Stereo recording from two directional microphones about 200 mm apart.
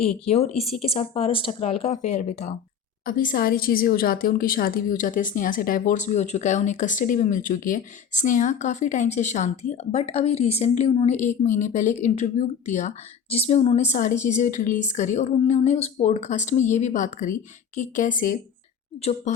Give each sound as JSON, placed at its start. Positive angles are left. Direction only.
{"t": 0.0, "sound": "a woman's voice", "side_deg": 30}
{"t": 3.1, "sound": "a woman's voice", "side_deg": 45}